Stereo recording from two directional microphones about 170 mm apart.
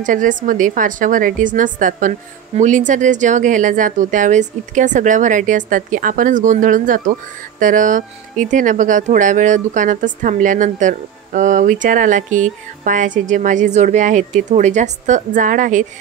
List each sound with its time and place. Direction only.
0.0 s a woman's voice: 50° right (ahead or behind)